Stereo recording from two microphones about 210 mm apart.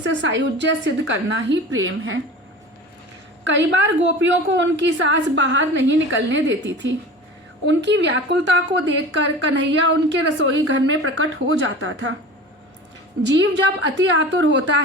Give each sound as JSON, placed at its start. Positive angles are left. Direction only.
{"t": 0.0, "sound": "a woman's voice", "side_deg": -60}
{"t": 3.4, "sound": "a woman's voice", "side_deg": -60}
{"t": 13.8, "sound": "a woman's voice", "side_deg": -60}